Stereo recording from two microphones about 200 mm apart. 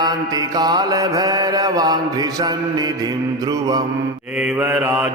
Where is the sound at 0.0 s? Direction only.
20° right (ahead or behind).